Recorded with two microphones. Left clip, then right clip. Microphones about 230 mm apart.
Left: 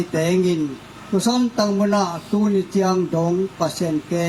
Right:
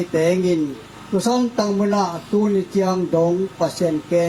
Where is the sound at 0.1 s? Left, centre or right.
Left.